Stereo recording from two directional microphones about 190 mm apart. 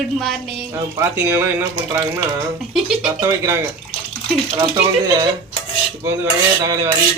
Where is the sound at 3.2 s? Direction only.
15° right (ahead or behind).